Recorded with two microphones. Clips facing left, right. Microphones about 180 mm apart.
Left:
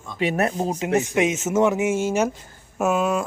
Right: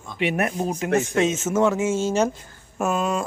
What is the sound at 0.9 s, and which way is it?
A man's voice, 15° left (ahead or behind).